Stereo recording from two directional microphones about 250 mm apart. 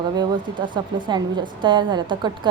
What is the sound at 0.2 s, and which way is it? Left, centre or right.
A woman's voice, centre.